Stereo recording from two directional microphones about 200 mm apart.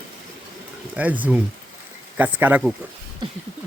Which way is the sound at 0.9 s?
10° right (ahead or behind).